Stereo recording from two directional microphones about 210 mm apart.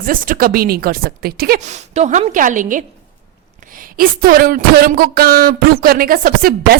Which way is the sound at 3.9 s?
45° right (ahead or behind).